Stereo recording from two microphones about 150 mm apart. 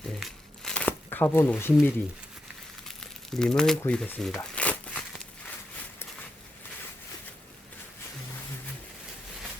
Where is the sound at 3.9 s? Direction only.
5° left (ahead or behind).